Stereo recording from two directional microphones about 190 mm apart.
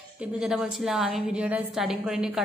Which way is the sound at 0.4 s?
Centre (ahead or behind).